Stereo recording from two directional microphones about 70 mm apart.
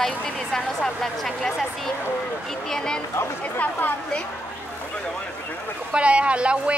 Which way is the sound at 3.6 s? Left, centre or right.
Left.